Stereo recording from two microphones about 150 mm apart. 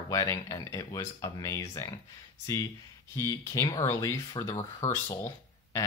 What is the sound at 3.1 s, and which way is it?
Speech, 20° left (ahead or behind).